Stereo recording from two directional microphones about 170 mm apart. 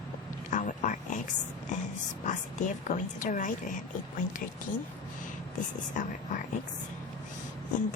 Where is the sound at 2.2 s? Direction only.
45° left (ahead or behind).